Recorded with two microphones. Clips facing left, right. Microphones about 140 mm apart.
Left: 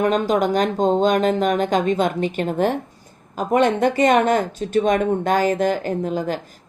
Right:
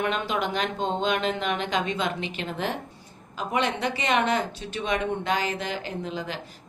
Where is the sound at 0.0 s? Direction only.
40° left (ahead or behind).